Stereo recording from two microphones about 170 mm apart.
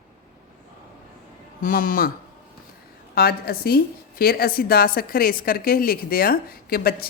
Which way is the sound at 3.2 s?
65° left (ahead or behind).